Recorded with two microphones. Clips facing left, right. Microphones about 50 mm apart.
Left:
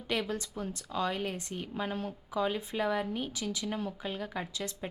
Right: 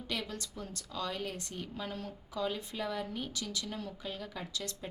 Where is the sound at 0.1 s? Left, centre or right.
Left.